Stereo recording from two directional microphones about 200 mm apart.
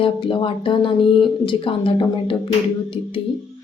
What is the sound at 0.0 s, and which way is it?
Speech, 25° left (ahead or behind).